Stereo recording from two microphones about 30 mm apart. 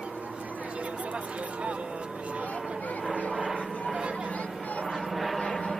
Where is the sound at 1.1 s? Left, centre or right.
Right.